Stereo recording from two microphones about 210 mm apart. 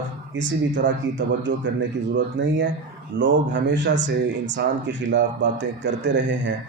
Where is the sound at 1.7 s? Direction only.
60° right (ahead or behind).